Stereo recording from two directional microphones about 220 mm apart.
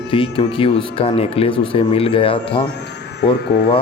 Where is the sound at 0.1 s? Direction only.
25° left (ahead or behind).